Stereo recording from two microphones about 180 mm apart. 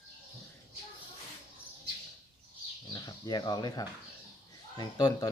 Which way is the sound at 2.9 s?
20° left (ahead or behind).